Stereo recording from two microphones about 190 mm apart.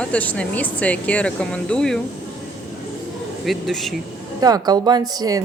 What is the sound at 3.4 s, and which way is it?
Speech, centre (ahead or behind).